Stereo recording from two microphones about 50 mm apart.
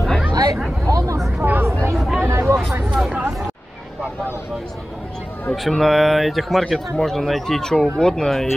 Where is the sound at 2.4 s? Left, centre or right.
Right.